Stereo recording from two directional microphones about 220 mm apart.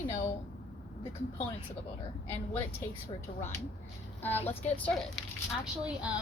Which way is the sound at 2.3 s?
10° left (ahead or behind).